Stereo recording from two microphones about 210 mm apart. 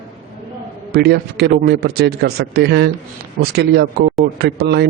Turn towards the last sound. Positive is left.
turn(degrees=-50)  # may be behind; listen again after turning